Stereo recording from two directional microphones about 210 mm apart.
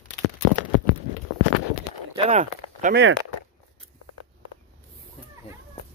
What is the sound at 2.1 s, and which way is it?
Speech, 30° right (ahead or behind).